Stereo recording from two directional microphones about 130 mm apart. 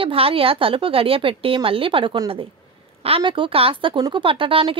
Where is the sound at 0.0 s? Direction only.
45° right (ahead or behind).